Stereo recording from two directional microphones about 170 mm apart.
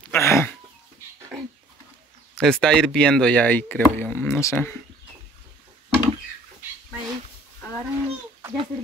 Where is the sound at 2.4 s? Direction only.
5° left (ahead or behind).